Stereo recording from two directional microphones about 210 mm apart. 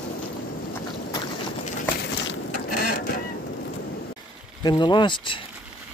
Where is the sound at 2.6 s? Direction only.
45° left (ahead or behind).